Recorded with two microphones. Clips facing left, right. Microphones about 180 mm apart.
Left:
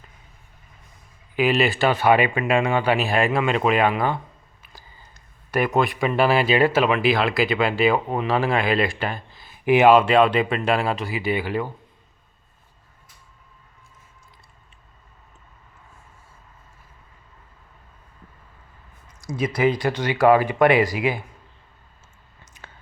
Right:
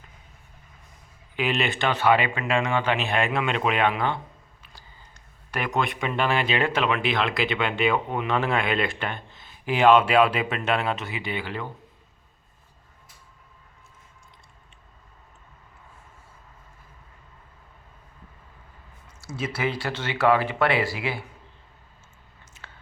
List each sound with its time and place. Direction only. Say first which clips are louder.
1.4 s speech: left 6 dB; centre (ahead or behind)
3.1 s speech: left 4 dB; centre (ahead or behind)
5.5 s speech: left 6 dB; 40° left (ahead or behind)
5.8 s speech: left 6 dB; centre (ahead or behind)
7.6 s speech: left 4 dB; 35° left (ahead or behind)
8.3 s speech: left 3 dB; 5° left (ahead or behind)
9.6 s speech: left 5 dB; 15° left (ahead or behind)
9.9 s speech: left 3 dB; 5° right (ahead or behind)
19.0 s speech: left 6 dB; 15° left (ahead or behind)
20.2 s speech: left 5 dB; 45° left (ahead or behind)
20.5 s speech: left 6 dB; 15° left (ahead or behind)